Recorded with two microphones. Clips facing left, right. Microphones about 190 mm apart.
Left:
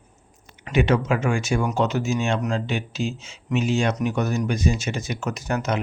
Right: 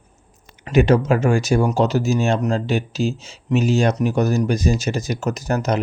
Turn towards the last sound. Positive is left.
turn(degrees=-40)  # may be behind; listen again after turning